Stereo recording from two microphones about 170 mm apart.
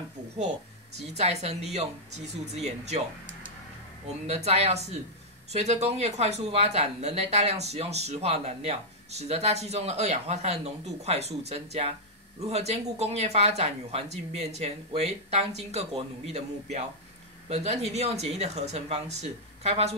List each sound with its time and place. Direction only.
0.9 s speech: 40° right (ahead or behind)
4.3 s speech: 40° right (ahead or behind)